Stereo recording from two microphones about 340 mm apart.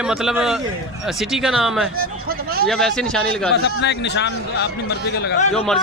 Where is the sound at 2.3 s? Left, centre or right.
Right.